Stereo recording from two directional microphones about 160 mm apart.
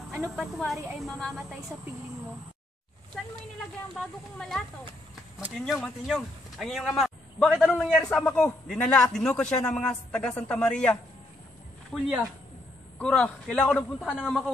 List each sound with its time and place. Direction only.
0.2 s a man's voice: centre (ahead or behind)
3.9 s a man's voice: centre (ahead or behind)
5.7 s a man's voice: centre (ahead or behind)
11.9 s a man's voice: 5° right (ahead or behind)
13.0 s a man's voice: 5° left (ahead or behind)
14.0 s a man's voice: 5° right (ahead or behind)